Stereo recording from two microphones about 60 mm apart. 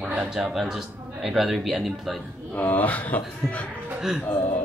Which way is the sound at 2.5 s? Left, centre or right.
Left.